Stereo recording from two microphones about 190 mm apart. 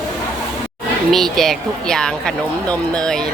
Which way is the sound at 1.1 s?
Centre (ahead or behind).